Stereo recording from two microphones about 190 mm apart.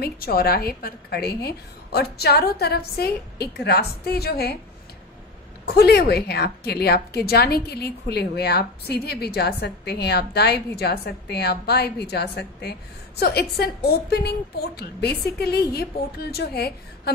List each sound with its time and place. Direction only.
0.0 s a woman's voice: 50° left (ahead or behind)
5.7 s a woman's voice: 60° left (ahead or behind)